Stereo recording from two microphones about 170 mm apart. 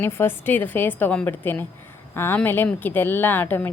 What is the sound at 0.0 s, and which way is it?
A woman's voice, 15° left (ahead or behind).